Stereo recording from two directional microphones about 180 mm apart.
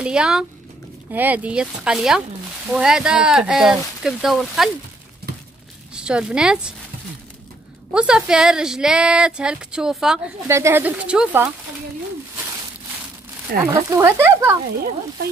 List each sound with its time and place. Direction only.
0.0 s speech: 5° right (ahead or behind)
5.9 s speech: 5° right (ahead or behind)
7.9 s speech: 5° right (ahead or behind)
13.5 s speech: 60° right (ahead or behind)
13.8 s speech: 15° right (ahead or behind)